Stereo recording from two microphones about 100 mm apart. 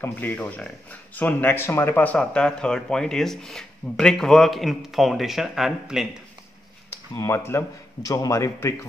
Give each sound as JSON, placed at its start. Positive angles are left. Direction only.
{"t": 0.0, "sound": "speech", "side_deg": 20}
{"t": 7.2, "sound": "a man's voice", "side_deg": 30}